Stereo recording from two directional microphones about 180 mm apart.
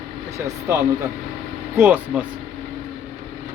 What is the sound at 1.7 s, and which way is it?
Speech, 10° right (ahead or behind).